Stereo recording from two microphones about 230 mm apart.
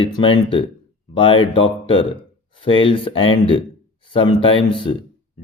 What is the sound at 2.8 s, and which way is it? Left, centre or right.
Speech, left.